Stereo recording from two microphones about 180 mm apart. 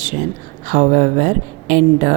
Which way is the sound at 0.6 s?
45° right (ahead or behind).